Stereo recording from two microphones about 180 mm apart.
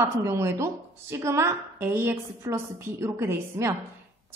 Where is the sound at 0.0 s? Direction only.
15° right (ahead or behind).